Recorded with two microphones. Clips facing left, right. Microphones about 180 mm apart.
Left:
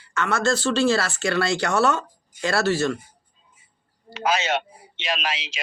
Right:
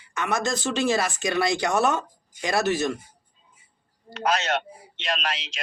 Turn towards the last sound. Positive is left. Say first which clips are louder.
# left 1 dB
turn(degrees=0)  # may be behind; listen again after turning